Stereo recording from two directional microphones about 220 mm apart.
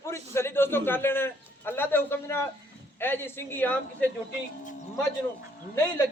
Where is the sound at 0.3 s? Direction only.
10° left (ahead or behind).